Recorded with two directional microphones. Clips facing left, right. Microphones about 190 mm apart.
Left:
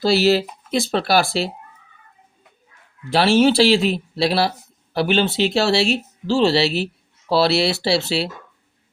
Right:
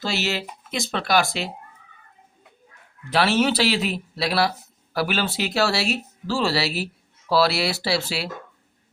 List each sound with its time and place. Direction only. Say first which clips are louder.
0.0 s speech: left 10 dB; 35° left (ahead or behind)
3.1 s speech: left 5 dB; 30° left (ahead or behind)